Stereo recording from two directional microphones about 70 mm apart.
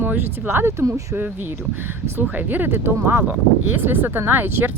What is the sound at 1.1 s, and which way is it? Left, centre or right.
Speech, right.